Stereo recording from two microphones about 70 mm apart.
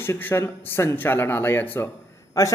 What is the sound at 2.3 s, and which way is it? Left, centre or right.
Speech, left.